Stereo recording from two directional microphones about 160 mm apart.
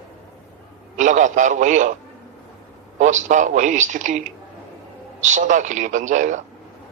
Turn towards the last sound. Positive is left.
turn(degrees=-50)  # may be behind; listen again after turning